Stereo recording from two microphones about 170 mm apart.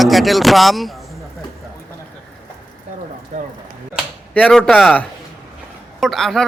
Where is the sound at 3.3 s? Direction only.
50° right (ahead or behind).